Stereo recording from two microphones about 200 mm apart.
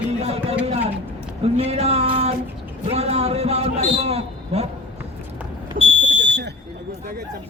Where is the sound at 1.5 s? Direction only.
30° right (ahead or behind).